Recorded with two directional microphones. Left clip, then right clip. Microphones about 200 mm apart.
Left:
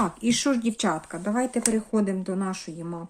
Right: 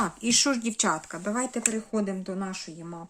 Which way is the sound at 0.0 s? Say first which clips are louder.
Even; 10° right (ahead or behind).